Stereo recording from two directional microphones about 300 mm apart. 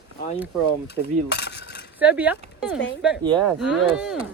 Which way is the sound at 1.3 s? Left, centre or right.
Left.